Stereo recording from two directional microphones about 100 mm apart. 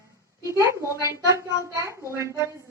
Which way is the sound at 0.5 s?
25° right (ahead or behind).